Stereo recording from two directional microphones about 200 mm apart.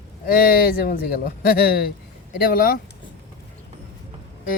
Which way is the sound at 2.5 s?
45° left (ahead or behind).